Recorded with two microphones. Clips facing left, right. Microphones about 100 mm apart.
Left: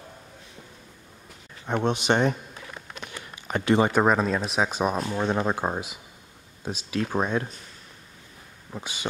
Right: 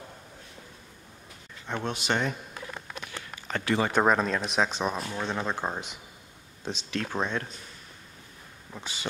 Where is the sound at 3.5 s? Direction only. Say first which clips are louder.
Left 6 dB; 20° left (ahead or behind).